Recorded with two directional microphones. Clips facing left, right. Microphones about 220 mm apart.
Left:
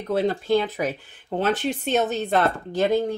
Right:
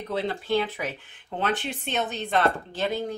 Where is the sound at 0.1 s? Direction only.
45° left (ahead or behind).